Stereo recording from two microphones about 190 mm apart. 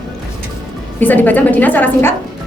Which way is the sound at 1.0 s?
10° left (ahead or behind).